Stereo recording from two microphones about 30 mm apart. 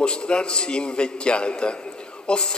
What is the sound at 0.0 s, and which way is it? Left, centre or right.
A man's voice, left.